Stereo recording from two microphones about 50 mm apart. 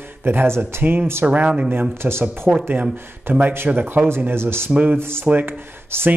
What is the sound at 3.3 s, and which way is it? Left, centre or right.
Speech, right.